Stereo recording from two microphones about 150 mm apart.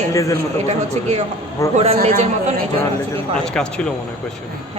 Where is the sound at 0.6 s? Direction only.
45° right (ahead or behind).